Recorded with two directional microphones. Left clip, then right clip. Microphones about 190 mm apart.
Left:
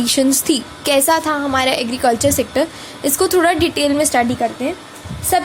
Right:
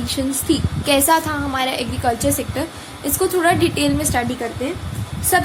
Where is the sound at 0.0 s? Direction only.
50° left (ahead or behind).